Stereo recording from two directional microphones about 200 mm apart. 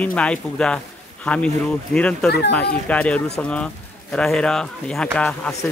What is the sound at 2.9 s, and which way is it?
A man's voice, 5° left (ahead or behind).